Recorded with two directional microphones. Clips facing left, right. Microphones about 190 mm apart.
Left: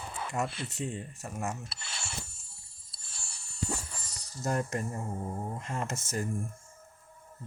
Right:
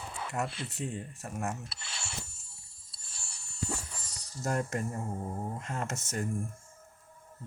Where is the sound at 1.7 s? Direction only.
50° left (ahead or behind).